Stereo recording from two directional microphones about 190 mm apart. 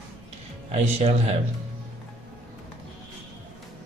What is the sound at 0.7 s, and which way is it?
Speech, 35° right (ahead or behind).